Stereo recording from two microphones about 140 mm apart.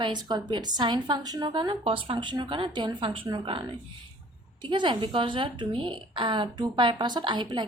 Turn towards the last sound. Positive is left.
turn(degrees=-35)  # may be behind; listen again after turning